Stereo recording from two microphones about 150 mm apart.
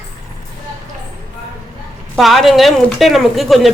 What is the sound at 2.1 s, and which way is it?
Speech, centre (ahead or behind).